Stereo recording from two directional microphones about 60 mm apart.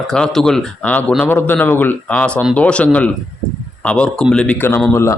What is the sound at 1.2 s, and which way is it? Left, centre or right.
Speech, left.